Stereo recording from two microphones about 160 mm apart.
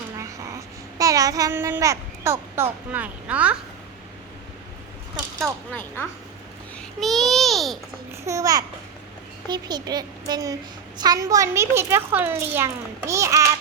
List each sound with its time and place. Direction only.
0.2 s a child's voice: 20° right (ahead or behind)
7.0 s a child's voice: centre (ahead or behind)
8.1 s a woman's voice: 20° right (ahead or behind)